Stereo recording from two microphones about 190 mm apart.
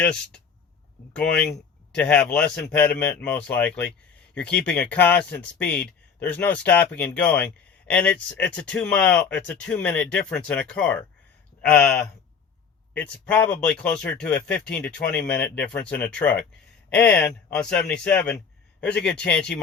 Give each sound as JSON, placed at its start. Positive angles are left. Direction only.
{"t": 0.0, "sound": "speech", "side_deg": 5}